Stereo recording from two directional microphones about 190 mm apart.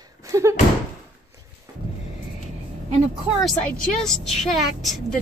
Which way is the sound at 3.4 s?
5° left (ahead or behind).